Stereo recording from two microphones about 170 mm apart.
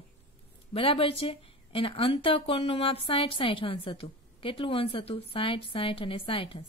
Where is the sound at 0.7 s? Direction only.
30° left (ahead or behind).